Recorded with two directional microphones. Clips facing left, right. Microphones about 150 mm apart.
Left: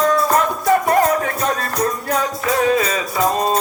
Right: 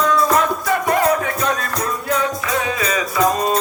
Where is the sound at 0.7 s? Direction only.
40° left (ahead or behind).